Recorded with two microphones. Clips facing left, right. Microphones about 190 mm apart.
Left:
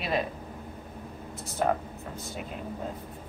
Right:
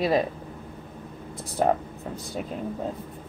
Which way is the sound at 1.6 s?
35° right (ahead or behind).